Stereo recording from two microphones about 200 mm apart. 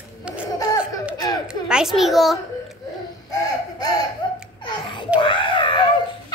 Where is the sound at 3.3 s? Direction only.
20° left (ahead or behind).